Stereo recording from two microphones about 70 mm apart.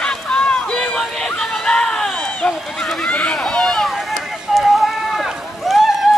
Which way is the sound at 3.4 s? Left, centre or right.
Centre.